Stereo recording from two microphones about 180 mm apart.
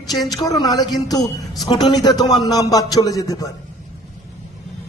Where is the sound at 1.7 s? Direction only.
20° left (ahead or behind).